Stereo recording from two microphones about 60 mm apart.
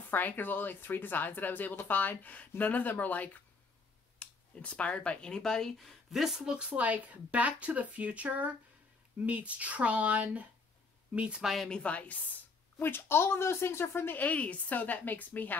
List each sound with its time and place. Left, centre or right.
0.1 s speech: left; by 6.4 s centre
6.4 s speech: centre
11.4 s speech: centre
11.7 s a woman's voice: left
12.7 s speech: left